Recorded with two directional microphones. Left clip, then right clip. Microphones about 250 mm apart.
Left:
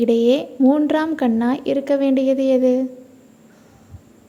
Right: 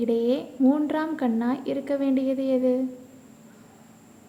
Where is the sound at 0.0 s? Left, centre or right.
Left.